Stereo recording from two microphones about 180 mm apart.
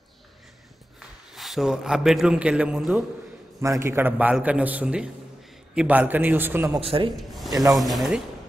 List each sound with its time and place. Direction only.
0.9 s a man's voice: centre (ahead or behind)
3.6 s a man's voice: 15° right (ahead or behind)
6.8 s speech: 30° right (ahead or behind)
7.2 s a sound: centre (ahead or behind)
7.7 s speech: centre (ahead or behind)